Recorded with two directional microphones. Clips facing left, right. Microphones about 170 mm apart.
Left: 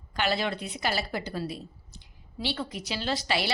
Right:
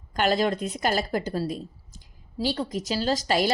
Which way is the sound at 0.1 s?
45° right (ahead or behind).